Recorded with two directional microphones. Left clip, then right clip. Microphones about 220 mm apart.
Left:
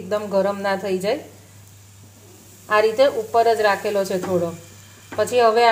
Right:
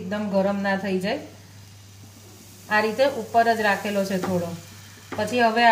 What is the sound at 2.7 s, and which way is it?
A woman's voice, 35° left (ahead or behind).